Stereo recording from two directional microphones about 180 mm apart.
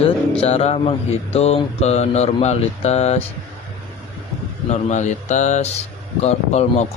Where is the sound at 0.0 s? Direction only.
35° left (ahead or behind).